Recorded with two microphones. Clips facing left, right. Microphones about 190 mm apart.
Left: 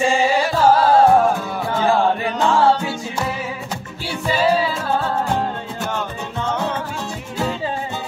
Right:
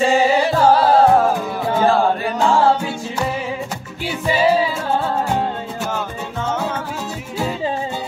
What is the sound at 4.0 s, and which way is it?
Music, 10° right (ahead or behind).